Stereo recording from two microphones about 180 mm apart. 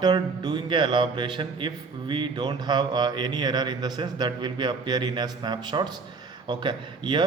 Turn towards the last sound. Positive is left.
turn(degrees=-25)  # may be behind; listen again after turning